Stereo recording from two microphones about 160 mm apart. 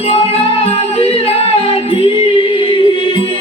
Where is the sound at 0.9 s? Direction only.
35° left (ahead or behind).